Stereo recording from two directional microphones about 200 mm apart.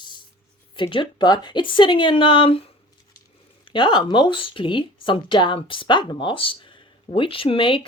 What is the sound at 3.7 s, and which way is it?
Speech, 25° left (ahead or behind).